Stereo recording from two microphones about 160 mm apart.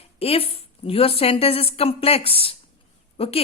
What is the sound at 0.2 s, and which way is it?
A woman's voice, 40° left (ahead or behind).